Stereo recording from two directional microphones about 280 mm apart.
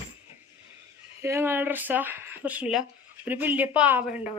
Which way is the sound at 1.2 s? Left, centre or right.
Centre.